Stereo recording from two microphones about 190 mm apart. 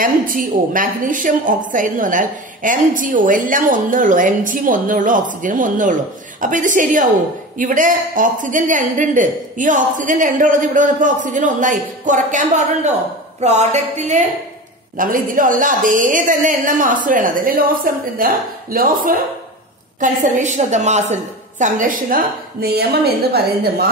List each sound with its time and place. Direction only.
0.0 s a woman's voice: 45° right (ahead or behind)